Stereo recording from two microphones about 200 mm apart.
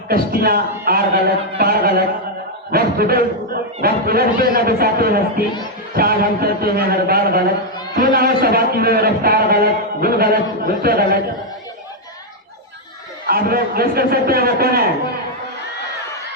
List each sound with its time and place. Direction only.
0.1 s a man's voice: 50° right (ahead or behind)
13.2 s a man's voice: 50° right (ahead or behind)